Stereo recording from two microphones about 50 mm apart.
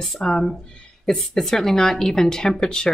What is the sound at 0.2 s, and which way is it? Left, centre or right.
Speech, centre.